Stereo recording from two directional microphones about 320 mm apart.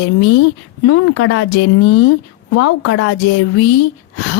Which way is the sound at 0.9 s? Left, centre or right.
Left.